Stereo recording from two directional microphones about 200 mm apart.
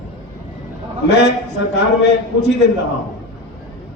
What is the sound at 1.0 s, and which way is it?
A man's voice, 60° left (ahead or behind).